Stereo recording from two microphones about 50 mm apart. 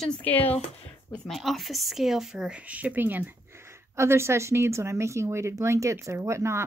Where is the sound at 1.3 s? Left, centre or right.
Centre.